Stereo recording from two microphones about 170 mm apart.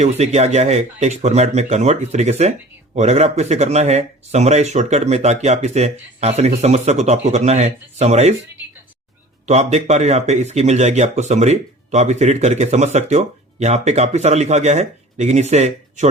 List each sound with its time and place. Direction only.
0.0 s speech: 40° right (ahead or behind)
9.5 s speech: 40° right (ahead or behind)